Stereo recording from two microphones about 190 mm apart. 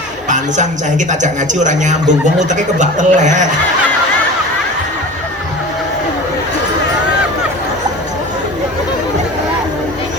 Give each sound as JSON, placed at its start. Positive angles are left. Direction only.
{"t": 0.3, "sound": "speech", "side_deg": -40}